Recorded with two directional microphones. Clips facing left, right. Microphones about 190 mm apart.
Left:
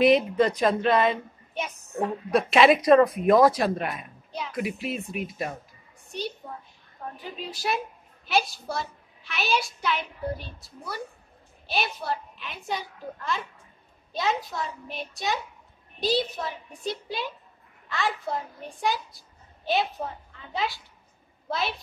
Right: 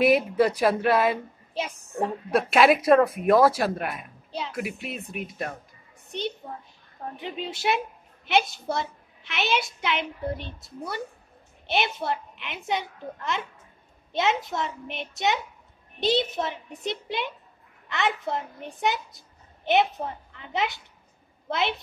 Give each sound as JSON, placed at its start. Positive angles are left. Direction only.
{"t": 0.0, "sound": "a woman's voice", "side_deg": -5}
{"t": 4.3, "sound": "speech", "side_deg": -30}
{"t": 4.6, "sound": "speech", "side_deg": 0}
{"t": 7.3, "sound": "a child's voice", "side_deg": -25}